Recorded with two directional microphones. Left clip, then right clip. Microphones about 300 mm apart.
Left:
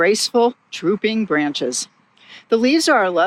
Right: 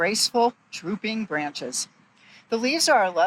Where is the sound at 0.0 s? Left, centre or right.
Left.